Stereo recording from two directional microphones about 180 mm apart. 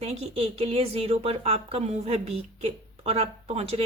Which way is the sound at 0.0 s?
35° right (ahead or behind).